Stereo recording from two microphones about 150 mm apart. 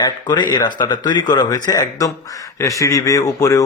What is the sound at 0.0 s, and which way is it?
Speech, 30° left (ahead or behind).